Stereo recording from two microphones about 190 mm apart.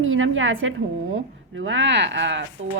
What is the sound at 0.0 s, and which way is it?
A woman's voice, 90° right.